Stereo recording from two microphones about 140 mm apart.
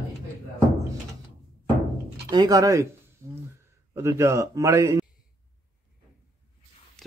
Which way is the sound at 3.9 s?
20° right (ahead or behind).